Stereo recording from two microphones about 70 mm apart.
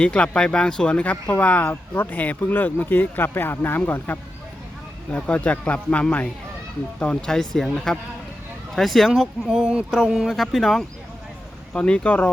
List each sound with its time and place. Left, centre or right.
0.0 s speech: centre
5.1 s speech: centre
9.5 s speech: centre
11.7 s speech: centre